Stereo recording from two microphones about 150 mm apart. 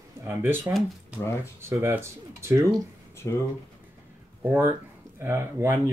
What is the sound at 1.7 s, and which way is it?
Speech, 15° right (ahead or behind).